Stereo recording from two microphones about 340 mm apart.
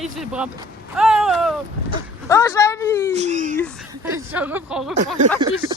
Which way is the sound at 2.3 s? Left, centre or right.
Centre.